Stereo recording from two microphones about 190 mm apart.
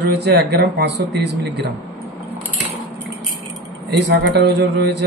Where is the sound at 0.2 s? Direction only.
60° right (ahead or behind).